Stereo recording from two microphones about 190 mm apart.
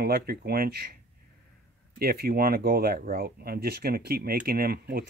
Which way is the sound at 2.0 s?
50° right (ahead or behind).